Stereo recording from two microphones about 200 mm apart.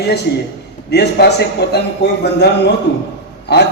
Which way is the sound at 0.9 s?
55° left (ahead or behind).